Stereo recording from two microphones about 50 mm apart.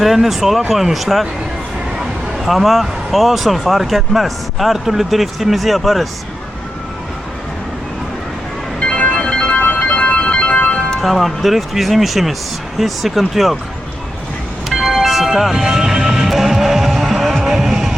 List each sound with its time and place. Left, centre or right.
0.0 s speech: centre
2.4 s speech: centre
8.8 s music: left
9.6 s music: left
11.0 s speech: centre
14.7 s music: centre